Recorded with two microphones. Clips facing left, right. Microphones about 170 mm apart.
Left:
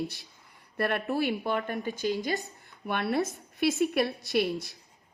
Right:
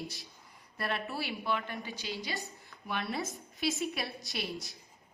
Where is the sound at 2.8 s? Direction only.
60° left (ahead or behind).